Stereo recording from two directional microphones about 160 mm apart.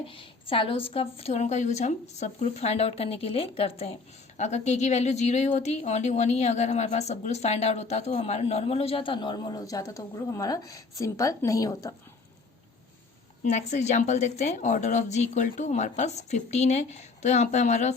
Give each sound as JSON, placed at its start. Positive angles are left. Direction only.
{"t": 0.1, "sound": "a woman's voice", "side_deg": 35}
{"t": 13.4, "sound": "speech", "side_deg": 50}